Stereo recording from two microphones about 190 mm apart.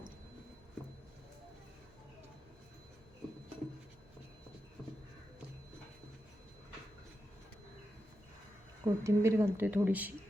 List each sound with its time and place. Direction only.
8.8 s speech: 15° right (ahead or behind)